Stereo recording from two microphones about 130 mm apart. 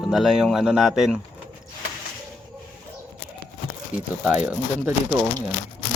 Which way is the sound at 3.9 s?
10° right (ahead or behind).